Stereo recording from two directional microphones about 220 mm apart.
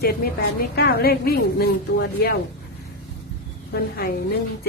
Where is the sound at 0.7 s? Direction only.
45° left (ahead or behind).